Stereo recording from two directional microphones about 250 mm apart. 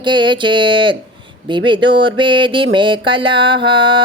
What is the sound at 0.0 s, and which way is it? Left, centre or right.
Speech, centre.